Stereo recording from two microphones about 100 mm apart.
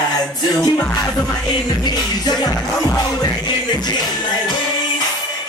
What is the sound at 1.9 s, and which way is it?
Music, 40° left (ahead or behind).